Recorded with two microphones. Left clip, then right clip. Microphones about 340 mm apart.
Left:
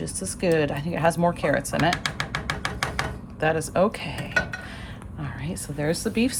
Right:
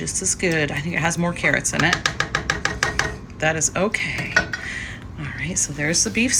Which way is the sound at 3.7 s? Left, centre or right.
Centre.